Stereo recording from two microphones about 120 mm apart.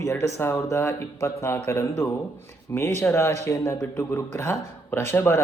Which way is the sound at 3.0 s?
20° left (ahead or behind).